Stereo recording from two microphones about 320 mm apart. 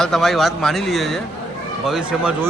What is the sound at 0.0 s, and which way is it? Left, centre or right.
A man's voice, centre.